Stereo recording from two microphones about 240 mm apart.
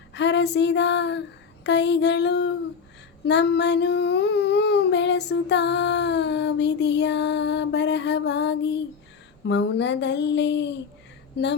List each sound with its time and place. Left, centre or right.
0.1 s female singing: left
1.6 s child singing: left